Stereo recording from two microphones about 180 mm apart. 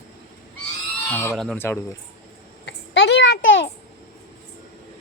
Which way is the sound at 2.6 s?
75° left (ahead or behind).